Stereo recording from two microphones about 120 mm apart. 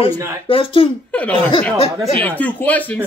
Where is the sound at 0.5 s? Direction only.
50° left (ahead or behind).